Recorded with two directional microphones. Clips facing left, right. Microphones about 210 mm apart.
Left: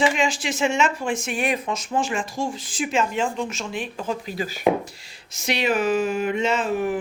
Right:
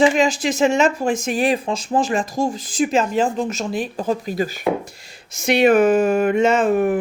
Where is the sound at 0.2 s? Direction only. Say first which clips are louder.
Right 6 dB; 40° right (ahead or behind).